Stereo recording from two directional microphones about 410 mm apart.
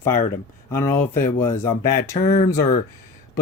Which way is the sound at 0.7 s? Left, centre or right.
Centre.